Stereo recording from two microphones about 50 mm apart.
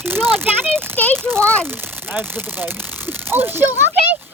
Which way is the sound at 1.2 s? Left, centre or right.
Right.